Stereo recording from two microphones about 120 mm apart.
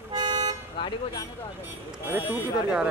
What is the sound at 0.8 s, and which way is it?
Speech, 45° left (ahead or behind).